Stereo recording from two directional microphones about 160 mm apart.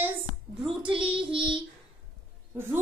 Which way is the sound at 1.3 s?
30° right (ahead or behind).